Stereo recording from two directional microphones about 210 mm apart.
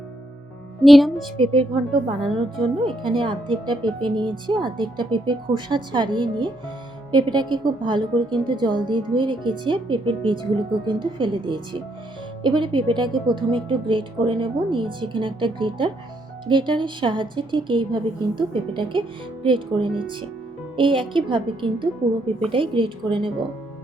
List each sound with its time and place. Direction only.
0.8 s a woman's voice: centre (ahead or behind)
1.5 s speech: 25° right (ahead or behind)
2.2 s a woman's voice: centre (ahead or behind)
2.8 s speech: 25° right (ahead or behind)